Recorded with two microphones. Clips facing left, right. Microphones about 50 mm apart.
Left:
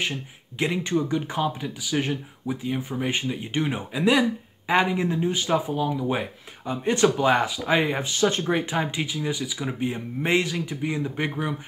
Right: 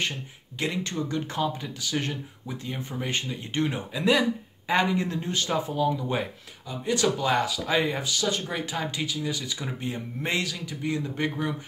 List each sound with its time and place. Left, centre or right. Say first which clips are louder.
0.0 s speech: left 2 dB; centre
6.7 s speech: left 4 dB; left
9.4 s speech: left 5 dB; centre